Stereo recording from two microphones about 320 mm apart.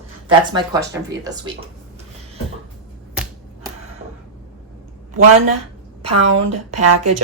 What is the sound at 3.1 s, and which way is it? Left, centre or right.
Finger snapping, centre.